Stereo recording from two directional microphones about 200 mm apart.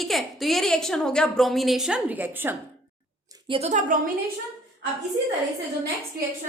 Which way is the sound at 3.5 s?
35° right (ahead or behind).